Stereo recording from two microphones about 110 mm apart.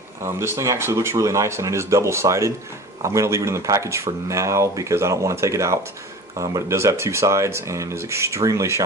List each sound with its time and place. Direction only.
0.3 s speech: 25° right (ahead or behind)